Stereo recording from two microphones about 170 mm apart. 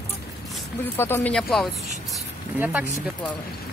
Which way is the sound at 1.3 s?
Centre (ahead or behind).